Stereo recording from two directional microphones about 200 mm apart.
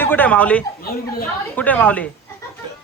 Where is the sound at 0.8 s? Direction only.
50° left (ahead or behind).